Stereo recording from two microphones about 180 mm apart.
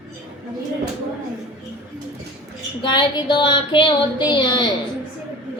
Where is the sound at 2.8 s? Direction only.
25° left (ahead or behind).